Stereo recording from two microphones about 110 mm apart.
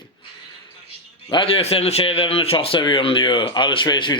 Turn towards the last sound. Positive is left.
turn(degrees=45)  # may be behind; listen again after turning